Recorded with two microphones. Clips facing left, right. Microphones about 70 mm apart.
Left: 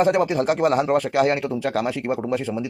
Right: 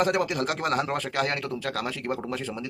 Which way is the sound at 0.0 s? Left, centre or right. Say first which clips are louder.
Left 6 dB; left.